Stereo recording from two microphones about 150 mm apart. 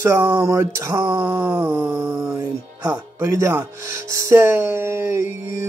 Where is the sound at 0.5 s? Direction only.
20° right (ahead or behind).